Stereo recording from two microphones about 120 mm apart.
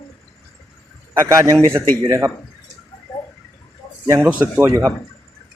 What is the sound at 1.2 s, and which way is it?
A man's voice, 25° right (ahead or behind).